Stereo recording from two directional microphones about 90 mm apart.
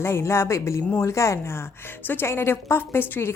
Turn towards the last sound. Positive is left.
turn(degrees=25)  # may be behind; listen again after turning